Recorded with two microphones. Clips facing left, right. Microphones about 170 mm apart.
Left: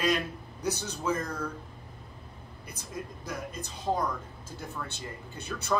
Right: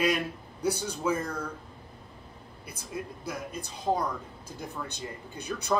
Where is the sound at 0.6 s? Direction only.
10° right (ahead or behind).